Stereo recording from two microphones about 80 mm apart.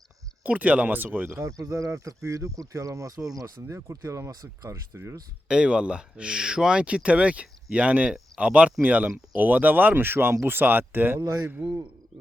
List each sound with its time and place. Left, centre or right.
0.4 s speech: centre
1.5 s speech: right
3.8 s speech: right
5.5 s speech: centre